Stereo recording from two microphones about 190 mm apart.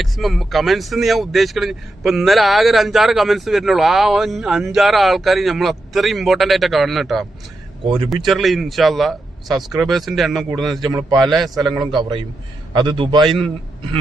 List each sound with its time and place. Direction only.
0.0 s speech: centre (ahead or behind)
7.9 s a man's voice: 30° right (ahead or behind)
8.1 s speech: centre (ahead or behind)
10.8 s a man's voice: 20° right (ahead or behind)
11.3 s speech: centre (ahead or behind)
11.7 s a man's voice: 25° right (ahead or behind)